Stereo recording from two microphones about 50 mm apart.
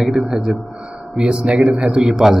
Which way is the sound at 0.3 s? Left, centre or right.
Centre.